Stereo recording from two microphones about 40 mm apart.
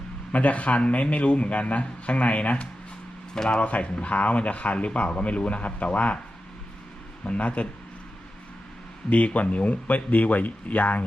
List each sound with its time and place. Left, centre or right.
0.3 s speech: left
3.3 s speech: centre
3.6 s speech: left
7.3 s speech: left
9.0 s speech: left